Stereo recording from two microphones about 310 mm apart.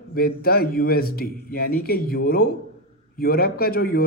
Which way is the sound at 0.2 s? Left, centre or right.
Left.